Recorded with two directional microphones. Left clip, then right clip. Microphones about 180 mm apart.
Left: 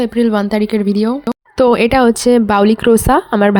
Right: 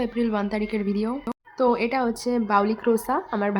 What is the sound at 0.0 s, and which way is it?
Speech, 40° left (ahead or behind).